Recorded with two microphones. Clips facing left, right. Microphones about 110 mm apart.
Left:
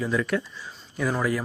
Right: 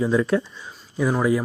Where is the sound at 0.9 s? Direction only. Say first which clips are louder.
Right 5 dB; 15° right (ahead or behind).